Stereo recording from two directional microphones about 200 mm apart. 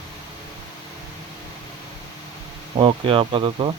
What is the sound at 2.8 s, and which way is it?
Speech, 25° right (ahead or behind).